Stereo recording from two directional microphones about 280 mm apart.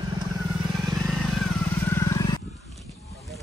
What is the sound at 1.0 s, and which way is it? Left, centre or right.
Vehicle, centre.